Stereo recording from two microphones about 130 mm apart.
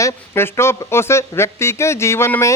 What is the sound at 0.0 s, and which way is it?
Speech, 20° left (ahead or behind).